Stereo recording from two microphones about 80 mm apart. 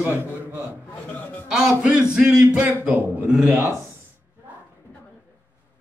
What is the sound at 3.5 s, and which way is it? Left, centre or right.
Speech, right.